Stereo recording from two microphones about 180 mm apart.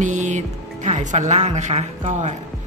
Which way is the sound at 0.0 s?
40° right (ahead or behind).